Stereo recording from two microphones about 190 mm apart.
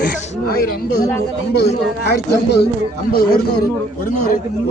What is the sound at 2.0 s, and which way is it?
A man's voice, 60° left (ahead or behind).